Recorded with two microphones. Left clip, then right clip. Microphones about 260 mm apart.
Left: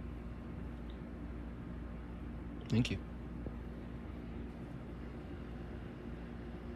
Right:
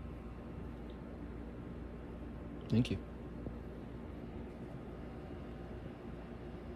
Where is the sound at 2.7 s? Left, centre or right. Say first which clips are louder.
Even; centre.